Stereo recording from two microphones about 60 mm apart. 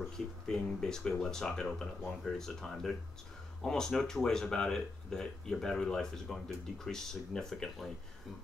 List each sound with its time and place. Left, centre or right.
0.5 s speech: centre